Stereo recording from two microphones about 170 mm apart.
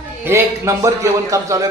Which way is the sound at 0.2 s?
15° right (ahead or behind).